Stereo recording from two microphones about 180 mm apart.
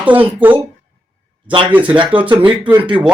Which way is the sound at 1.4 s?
25° right (ahead or behind).